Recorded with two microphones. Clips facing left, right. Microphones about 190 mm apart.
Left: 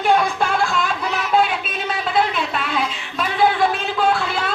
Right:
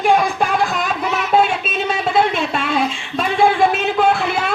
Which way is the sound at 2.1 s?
25° right (ahead or behind).